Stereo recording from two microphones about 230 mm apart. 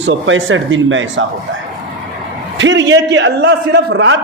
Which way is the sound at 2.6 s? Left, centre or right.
Right.